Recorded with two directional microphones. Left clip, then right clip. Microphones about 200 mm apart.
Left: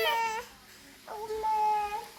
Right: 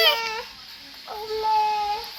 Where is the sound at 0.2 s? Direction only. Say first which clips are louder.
Right 3 dB; 40° left (ahead or behind).